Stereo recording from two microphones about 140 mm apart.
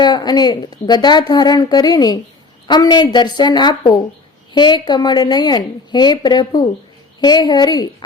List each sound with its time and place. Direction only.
0.0 s a woman's voice: 30° left (ahead or behind)